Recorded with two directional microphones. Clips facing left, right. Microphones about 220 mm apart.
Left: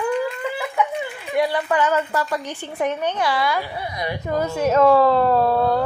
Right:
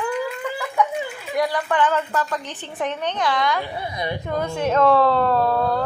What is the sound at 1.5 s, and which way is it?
Speech, 10° left (ahead or behind).